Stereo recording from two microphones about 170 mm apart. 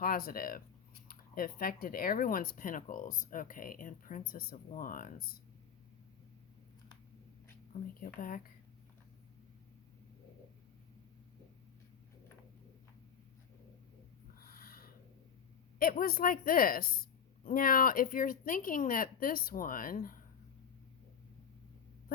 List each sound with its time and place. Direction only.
0.0 s a woman's voice: 60° left (ahead or behind)
8.0 s a woman's voice: 55° left (ahead or behind)
14.3 s a sound: 60° left (ahead or behind)
15.8 s a woman's voice: 60° left (ahead or behind)